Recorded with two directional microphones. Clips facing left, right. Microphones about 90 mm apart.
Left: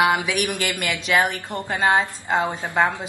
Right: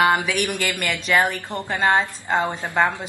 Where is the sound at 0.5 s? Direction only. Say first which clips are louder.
Even; 5° left (ahead or behind).